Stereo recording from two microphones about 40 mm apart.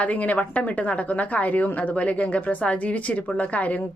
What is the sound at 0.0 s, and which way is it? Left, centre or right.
A woman's voice, left.